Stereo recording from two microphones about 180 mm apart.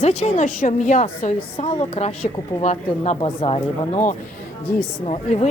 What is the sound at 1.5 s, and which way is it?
Speech, 30° left (ahead or behind).